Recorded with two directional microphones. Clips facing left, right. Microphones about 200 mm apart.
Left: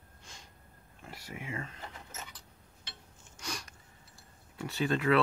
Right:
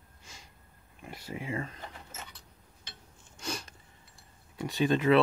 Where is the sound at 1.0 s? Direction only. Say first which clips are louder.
Right 4 dB; 20° right (ahead or behind).